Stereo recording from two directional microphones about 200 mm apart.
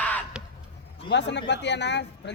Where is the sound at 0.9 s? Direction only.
60° left (ahead or behind).